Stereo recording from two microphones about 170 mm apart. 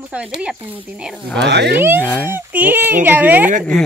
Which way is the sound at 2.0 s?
10° left (ahead or behind).